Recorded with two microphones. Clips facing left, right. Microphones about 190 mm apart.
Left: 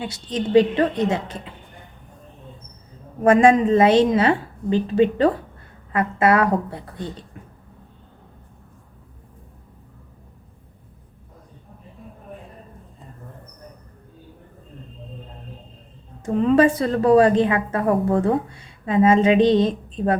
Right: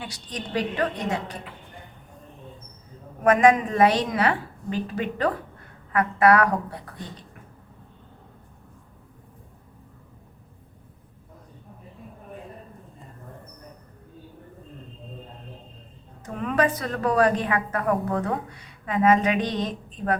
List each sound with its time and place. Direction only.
0.0 s a woman's voice: 25° left (ahead or behind)
3.2 s a woman's voice: 30° left (ahead or behind)
16.2 s a woman's voice: 25° left (ahead or behind)